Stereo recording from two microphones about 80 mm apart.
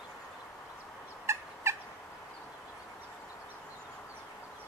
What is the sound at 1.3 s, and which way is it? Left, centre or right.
Fowl, right.